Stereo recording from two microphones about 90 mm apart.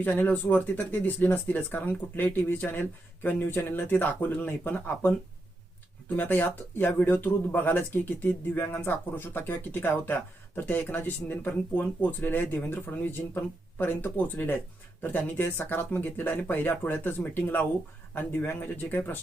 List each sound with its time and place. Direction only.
0.0 s speech: 20° left (ahead or behind)
6.1 s speech: 20° left (ahead or behind)